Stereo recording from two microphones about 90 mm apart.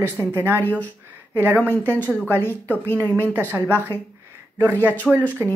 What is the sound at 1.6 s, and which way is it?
Speech, 25° left (ahead or behind).